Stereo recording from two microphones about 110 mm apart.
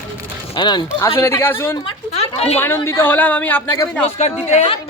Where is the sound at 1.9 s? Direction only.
70° left (ahead or behind).